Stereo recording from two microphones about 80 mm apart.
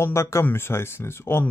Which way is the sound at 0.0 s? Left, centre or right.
Left.